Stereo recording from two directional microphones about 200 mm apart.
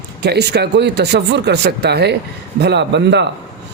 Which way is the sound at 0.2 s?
55° right (ahead or behind).